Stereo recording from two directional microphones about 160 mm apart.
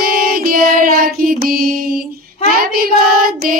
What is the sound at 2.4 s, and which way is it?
Child singing, 65° right (ahead or behind).